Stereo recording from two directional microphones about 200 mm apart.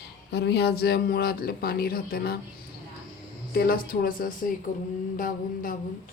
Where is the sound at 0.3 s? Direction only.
55° left (ahead or behind).